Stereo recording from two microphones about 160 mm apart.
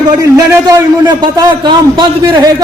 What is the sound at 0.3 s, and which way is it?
A man's voice, 25° right (ahead or behind).